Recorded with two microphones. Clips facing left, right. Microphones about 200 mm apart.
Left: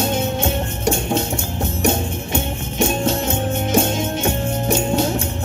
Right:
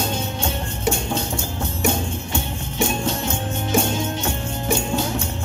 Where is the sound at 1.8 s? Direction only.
20° left (ahead or behind).